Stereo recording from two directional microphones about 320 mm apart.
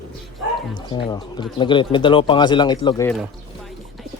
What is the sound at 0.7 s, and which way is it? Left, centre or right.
Speech, centre.